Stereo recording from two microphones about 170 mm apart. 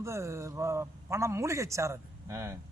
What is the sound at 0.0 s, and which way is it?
A man's voice, 15° right (ahead or behind).